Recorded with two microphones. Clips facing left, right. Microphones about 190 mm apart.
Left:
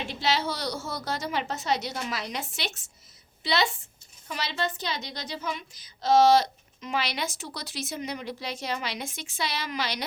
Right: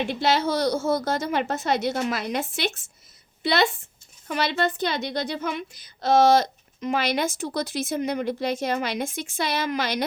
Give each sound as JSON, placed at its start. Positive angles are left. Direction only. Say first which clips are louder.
{"t": 0.1, "sound": "a woman's voice", "louder": "right 3 dB", "side_deg": -50}